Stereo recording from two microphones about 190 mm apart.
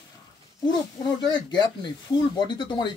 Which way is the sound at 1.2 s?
20° left (ahead or behind).